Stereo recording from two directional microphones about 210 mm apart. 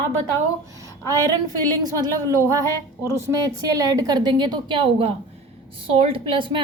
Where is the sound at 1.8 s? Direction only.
15° right (ahead or behind).